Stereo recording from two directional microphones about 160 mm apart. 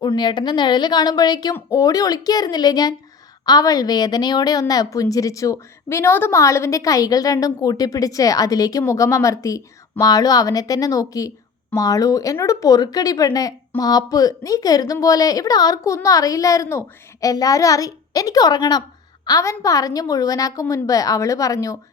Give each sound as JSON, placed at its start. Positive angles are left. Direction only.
{"t": 0.0, "sound": "speech", "side_deg": 25}